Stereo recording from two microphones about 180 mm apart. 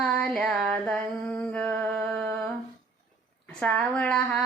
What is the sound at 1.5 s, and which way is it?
Music, 5° left (ahead or behind).